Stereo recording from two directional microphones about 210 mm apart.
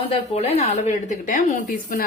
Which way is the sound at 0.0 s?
30° left (ahead or behind).